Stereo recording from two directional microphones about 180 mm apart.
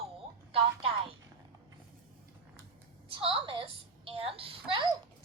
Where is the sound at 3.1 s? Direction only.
30° right (ahead or behind).